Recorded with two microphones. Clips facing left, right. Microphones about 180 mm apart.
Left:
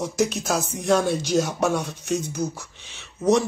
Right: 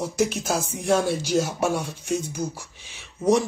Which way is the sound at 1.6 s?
5° right (ahead or behind).